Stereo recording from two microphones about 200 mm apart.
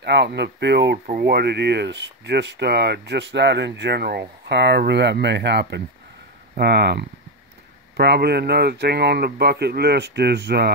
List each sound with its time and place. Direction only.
0.0 s speech: 55° right (ahead or behind)